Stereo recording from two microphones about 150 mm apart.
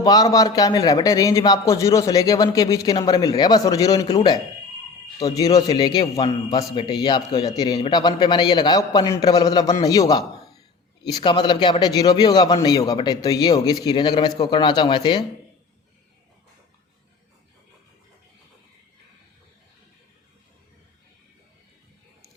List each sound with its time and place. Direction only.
0.0 s a man's voice: 25° left (ahead or behind)
5.2 s a man's voice: 25° left (ahead or behind)